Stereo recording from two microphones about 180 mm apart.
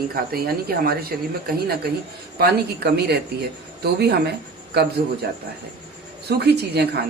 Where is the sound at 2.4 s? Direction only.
65° right (ahead or behind).